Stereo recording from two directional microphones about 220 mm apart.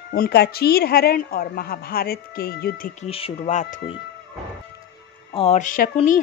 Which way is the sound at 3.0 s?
25° left (ahead or behind).